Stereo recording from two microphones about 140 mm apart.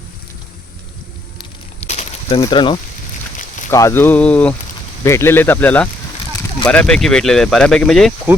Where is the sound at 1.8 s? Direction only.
55° left (ahead or behind).